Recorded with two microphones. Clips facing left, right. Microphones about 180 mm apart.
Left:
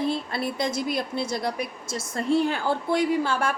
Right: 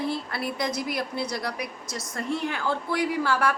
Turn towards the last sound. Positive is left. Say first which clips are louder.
# left 1 dB
turn(degrees=25)  # may be behind; listen again after turning